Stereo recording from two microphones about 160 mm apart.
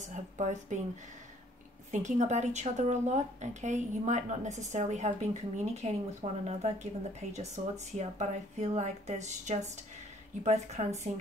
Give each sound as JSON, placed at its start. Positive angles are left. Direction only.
{"t": 0.0, "sound": "speech", "side_deg": -50}
{"t": 1.9, "sound": "speech", "side_deg": -50}